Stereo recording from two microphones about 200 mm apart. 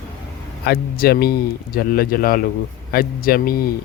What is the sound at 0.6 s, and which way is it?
Speech, 50° left (ahead or behind).